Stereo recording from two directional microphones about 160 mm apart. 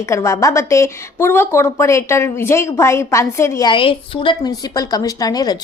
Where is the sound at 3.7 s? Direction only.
35° left (ahead or behind).